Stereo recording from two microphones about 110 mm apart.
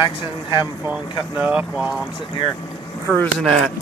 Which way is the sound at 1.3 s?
15° right (ahead or behind).